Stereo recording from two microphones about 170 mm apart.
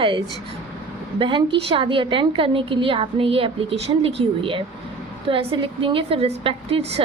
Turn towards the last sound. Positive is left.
turn(degrees=-35)  # may be behind; listen again after turning